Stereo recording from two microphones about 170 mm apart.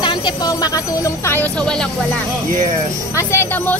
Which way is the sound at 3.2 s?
15° left (ahead or behind).